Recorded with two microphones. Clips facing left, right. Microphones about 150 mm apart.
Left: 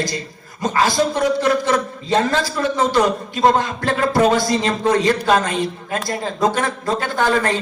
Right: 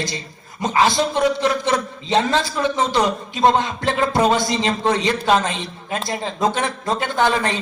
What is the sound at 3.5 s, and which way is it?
Speech, 45° left (ahead or behind).